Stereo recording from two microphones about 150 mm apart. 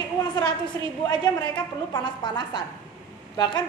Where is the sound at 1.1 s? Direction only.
30° left (ahead or behind).